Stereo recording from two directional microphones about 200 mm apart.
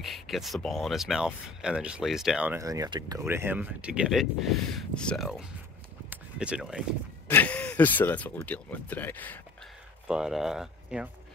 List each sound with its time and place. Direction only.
0.0 s speech: centre (ahead or behind)
6.0 s a sound: 5° right (ahead or behind)
7.2 s speech: 10° left (ahead or behind)
10.0 s speech: 5° right (ahead or behind)